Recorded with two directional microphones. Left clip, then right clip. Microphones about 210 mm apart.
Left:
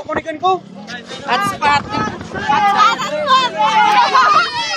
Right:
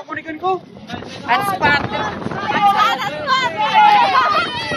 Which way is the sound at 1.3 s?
20° right (ahead or behind).